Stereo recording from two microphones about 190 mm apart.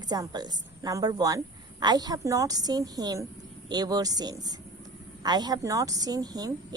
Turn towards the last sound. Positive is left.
turn(degrees=-20)  # may be behind; listen again after turning